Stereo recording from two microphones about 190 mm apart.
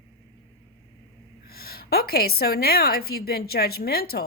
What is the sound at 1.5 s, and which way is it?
Speech, 55° left (ahead or behind).